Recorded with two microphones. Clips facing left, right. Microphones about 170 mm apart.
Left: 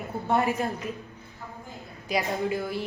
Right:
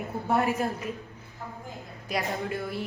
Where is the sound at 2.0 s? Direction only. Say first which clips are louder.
Left 3 dB; centre (ahead or behind).